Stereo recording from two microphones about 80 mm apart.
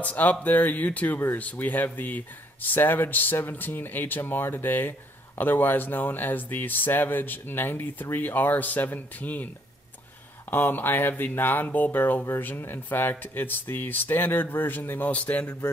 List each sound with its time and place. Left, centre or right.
0.0 s speech: centre
10.5 s speech: left